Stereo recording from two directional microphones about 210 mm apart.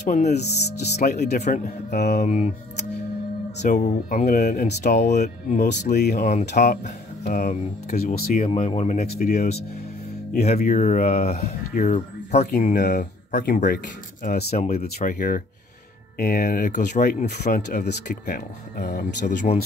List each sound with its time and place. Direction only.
0.0 s speech: 35° left (ahead or behind); by 2.2 s 50° left (ahead or behind)
2.2 s speech: 35° left (ahead or behind)
3.6 s speech: 35° left (ahead or behind)
4.6 s speech: 35° left (ahead or behind)
5.9 s speech: 45° left (ahead or behind); by 9.0 s 30° left (ahead or behind)
9.2 s speech: 45° left (ahead or behind)
10.4 s speech: 35° left (ahead or behind)
14.5 s speech: 30° left (ahead or behind); by 19.2 s 50° left (ahead or behind)